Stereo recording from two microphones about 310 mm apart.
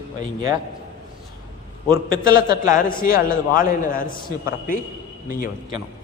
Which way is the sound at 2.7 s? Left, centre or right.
Left.